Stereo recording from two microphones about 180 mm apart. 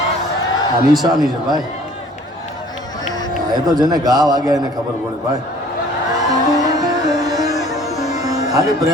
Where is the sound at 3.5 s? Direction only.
20° right (ahead or behind).